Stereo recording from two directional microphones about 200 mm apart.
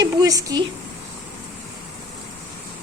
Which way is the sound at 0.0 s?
20° right (ahead or behind).